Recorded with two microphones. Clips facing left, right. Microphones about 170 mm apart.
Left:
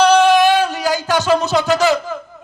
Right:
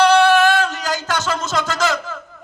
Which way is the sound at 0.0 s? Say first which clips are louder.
Left 2 dB; 15° left (ahead or behind).